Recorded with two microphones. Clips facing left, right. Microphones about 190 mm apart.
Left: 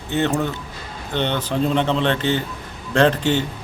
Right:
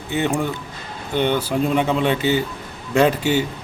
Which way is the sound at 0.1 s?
10° right (ahead or behind).